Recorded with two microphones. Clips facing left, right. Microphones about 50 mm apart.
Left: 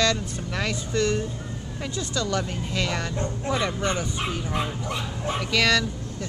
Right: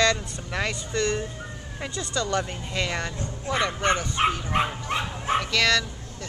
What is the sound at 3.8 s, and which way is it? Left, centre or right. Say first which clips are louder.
Speech: right 4 dB; right.